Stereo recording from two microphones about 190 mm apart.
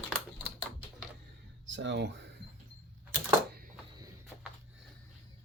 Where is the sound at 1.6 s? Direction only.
70° right (ahead or behind).